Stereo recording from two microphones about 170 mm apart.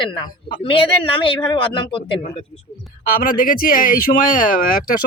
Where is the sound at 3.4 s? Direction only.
55° left (ahead or behind).